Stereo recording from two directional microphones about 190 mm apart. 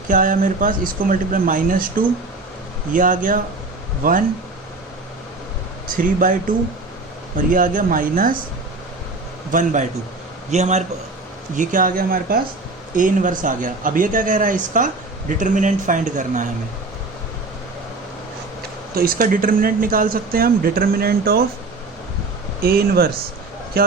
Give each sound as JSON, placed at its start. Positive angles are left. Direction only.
{"t": 0.1, "sound": "speech", "side_deg": -45}
{"t": 6.0, "sound": "speech", "side_deg": -45}
{"t": 7.3, "sound": "speech", "side_deg": -45}
{"t": 9.5, "sound": "a man's voice", "side_deg": -45}
{"t": 18.9, "sound": "speech", "side_deg": -50}
{"t": 22.6, "sound": "speech", "side_deg": -55}